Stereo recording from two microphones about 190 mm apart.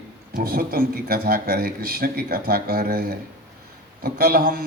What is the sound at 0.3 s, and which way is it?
A man's voice, 50° right (ahead or behind).